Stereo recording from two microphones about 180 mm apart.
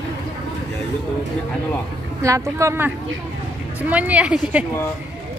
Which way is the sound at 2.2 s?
15° right (ahead or behind).